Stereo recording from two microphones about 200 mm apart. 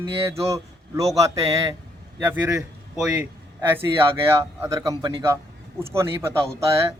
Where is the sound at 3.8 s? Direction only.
15° right (ahead or behind).